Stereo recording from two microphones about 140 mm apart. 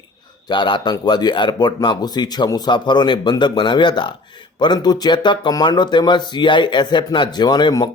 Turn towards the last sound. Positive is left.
turn(degrees=30)  # may be behind; listen again after turning